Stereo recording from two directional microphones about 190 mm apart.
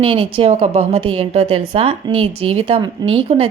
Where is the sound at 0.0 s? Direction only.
30° right (ahead or behind).